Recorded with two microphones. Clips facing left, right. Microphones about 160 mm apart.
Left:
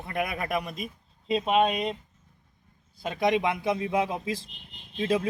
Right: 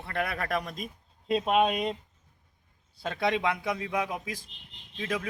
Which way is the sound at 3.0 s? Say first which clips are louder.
Left 3 dB; 15° left (ahead or behind).